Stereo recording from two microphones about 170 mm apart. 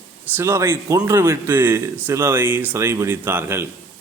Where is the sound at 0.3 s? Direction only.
15° right (ahead or behind).